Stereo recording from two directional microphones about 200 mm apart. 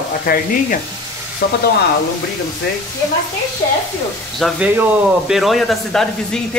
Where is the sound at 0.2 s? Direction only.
45° left (ahead or behind).